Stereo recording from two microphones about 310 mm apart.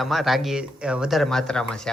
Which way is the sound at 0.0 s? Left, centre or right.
Centre.